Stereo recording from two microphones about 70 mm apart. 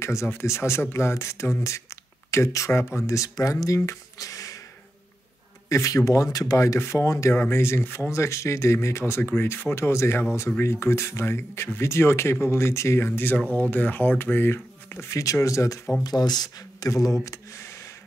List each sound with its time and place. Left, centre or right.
0.0 s speech: left
5.7 s speech: left
15.0 s speech: left
16.0 s speech: left